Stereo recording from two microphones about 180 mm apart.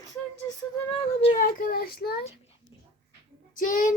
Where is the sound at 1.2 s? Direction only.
45° left (ahead or behind); by 2.2 s 60° left (ahead or behind).